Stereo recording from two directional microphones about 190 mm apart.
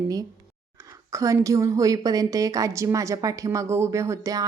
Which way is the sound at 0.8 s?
15° right (ahead or behind).